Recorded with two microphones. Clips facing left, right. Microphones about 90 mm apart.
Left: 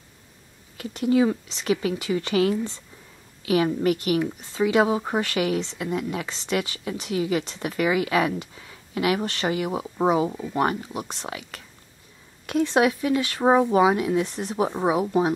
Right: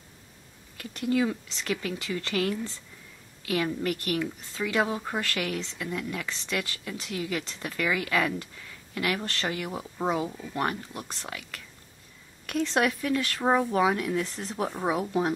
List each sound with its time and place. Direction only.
0.7 s speech: 20° left (ahead or behind)